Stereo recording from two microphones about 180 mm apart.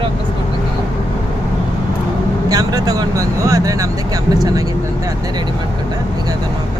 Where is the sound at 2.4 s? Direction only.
20° right (ahead or behind).